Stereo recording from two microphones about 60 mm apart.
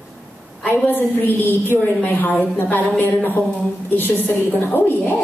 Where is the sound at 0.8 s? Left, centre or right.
Left.